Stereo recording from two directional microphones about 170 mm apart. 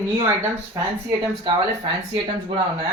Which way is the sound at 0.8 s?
20° right (ahead or behind).